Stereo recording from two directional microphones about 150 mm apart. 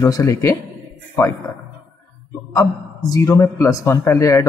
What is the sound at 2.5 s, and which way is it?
A man's voice, 25° left (ahead or behind).